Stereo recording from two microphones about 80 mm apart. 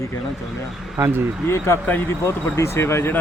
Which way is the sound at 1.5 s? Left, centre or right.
Left.